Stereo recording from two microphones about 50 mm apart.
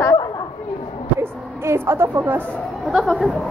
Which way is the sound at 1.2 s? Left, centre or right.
Right.